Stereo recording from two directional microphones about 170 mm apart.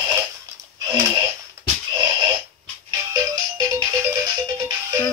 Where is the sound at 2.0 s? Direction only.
25° right (ahead or behind).